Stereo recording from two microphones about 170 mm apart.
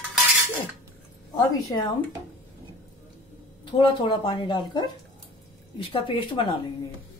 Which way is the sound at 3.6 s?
30° left (ahead or behind).